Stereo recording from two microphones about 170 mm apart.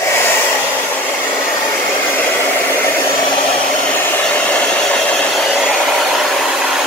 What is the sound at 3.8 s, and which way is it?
Hair dryer, 10° left (ahead or behind).